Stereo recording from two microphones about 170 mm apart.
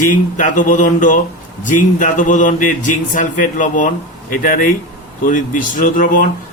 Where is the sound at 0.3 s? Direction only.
50° left (ahead or behind).